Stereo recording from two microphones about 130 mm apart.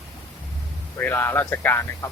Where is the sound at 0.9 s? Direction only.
15° left (ahead or behind).